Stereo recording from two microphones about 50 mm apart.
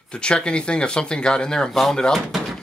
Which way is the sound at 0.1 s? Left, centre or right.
Centre.